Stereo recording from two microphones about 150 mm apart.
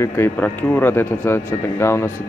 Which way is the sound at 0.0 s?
15° left (ahead or behind).